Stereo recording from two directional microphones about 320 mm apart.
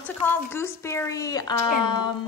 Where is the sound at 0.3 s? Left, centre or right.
Centre.